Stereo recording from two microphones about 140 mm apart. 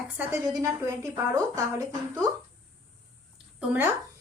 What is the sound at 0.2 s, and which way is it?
A woman's voice, 15° right (ahead or behind).